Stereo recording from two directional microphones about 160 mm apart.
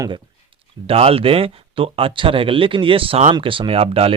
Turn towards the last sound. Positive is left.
turn(degrees=-35)  # may be behind; listen again after turning